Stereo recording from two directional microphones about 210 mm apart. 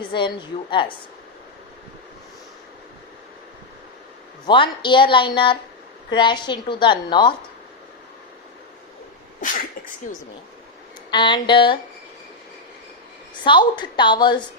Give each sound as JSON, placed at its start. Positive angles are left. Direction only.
{"t": 0.0, "sound": "a woman's voice", "side_deg": 25}
{"t": 4.4, "sound": "a woman's voice", "side_deg": 25}
{"t": 9.4, "sound": "speech", "side_deg": 40}
{"t": 11.1, "sound": "a woman's voice", "side_deg": 20}
{"t": 13.4, "sound": "a woman's voice", "side_deg": 20}